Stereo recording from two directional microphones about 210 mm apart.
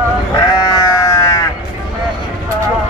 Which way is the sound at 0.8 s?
15° left (ahead or behind).